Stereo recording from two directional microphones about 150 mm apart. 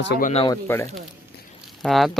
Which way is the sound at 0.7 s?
15° left (ahead or behind).